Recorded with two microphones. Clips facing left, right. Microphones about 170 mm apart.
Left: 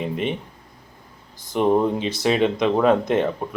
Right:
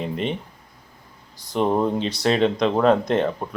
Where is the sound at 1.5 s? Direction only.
10° left (ahead or behind).